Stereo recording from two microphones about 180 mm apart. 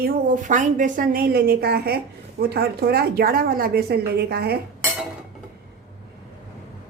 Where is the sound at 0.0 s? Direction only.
50° right (ahead or behind).